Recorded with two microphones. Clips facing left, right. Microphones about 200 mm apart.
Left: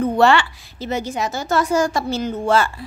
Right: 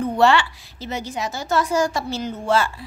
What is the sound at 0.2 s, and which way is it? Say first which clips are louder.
A woman's voice: even; 55° left (ahead or behind).